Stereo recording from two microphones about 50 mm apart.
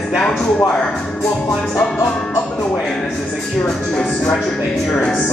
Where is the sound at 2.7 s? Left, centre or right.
Centre.